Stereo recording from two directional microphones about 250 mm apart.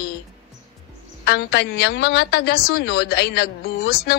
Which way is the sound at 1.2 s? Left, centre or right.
Left.